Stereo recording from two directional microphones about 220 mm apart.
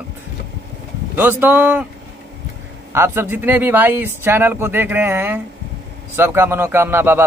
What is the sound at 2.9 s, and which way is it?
A man's voice, 10° right (ahead or behind).